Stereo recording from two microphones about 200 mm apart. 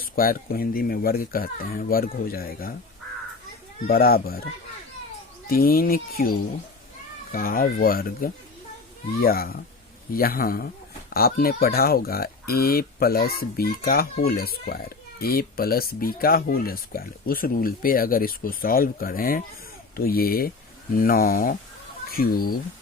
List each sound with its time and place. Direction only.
0.0 s speech: 45° left (ahead or behind)
3.8 s speech: 50° left (ahead or behind)
5.5 s speech: 45° left (ahead or behind)
7.3 s speech: 45° left (ahead or behind)